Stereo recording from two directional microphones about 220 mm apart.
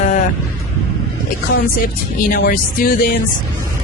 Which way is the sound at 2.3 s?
40° left (ahead or behind).